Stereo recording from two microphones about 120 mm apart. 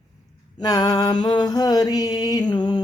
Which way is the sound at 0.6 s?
35° left (ahead or behind).